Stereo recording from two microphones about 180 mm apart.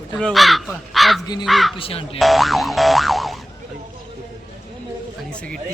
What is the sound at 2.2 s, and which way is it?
Boing, centre (ahead or behind).